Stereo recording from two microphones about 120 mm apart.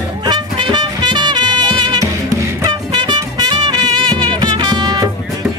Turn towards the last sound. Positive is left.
turn(degrees=-35)  # may be behind; listen again after turning